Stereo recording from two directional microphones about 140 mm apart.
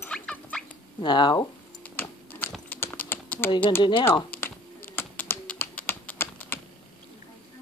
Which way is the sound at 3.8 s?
35° left (ahead or behind).